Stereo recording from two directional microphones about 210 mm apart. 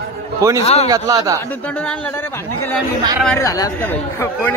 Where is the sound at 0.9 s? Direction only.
15° right (ahead or behind).